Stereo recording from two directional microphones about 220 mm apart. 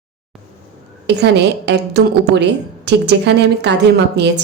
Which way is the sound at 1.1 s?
50° right (ahead or behind).